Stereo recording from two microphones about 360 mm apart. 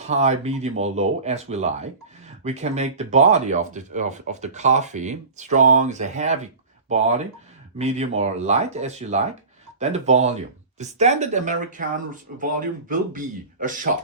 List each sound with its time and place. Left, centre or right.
0.0 s speech: centre